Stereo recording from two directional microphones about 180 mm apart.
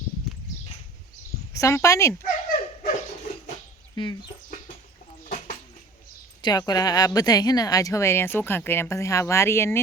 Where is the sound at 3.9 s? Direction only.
25° left (ahead or behind).